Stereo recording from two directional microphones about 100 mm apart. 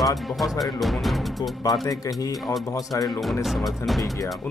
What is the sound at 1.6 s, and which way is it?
Speech, 40° left (ahead or behind).